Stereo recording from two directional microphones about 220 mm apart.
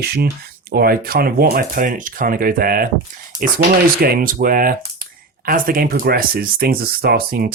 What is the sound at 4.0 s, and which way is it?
Speech, 40° right (ahead or behind).